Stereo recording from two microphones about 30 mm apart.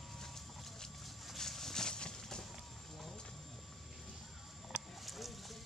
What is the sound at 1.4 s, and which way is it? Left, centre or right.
Clip-clop, centre.